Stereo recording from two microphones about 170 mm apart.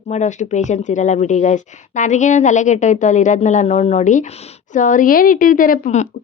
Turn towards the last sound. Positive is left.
turn(degrees=50)  # may be behind; listen again after turning